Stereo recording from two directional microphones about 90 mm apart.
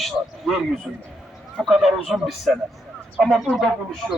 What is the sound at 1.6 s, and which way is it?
A man's voice, 5° right (ahead or behind).